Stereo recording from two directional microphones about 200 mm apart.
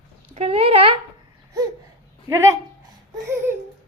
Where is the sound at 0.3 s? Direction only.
30° right (ahead or behind).